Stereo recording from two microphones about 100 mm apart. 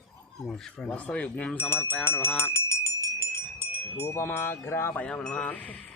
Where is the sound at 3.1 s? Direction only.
20° left (ahead or behind).